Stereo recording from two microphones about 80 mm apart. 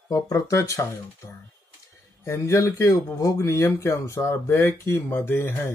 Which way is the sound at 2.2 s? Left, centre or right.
Left.